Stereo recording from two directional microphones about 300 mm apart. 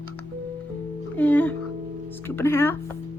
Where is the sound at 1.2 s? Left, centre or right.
Centre.